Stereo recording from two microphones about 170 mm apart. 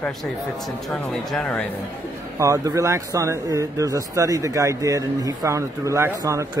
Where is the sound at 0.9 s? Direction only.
5° left (ahead or behind).